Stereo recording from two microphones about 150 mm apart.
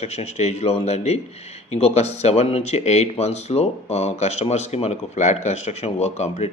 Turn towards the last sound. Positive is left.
turn(degrees=45)  # may be behind; listen again after turning